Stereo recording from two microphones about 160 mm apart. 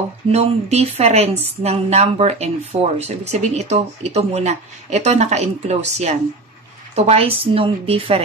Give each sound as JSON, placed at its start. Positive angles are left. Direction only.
{"t": 0.3, "sound": "a woman's voice", "side_deg": -40}